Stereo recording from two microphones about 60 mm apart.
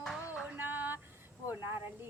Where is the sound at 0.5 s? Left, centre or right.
Right.